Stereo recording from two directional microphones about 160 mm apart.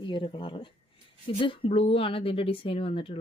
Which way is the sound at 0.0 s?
30° left (ahead or behind).